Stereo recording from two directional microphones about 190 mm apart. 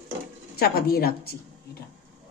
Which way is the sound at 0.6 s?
55° left (ahead or behind).